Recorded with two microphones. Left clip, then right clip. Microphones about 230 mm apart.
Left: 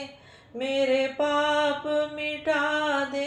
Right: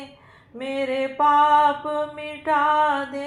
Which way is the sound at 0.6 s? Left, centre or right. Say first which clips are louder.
Left 1 dB; right.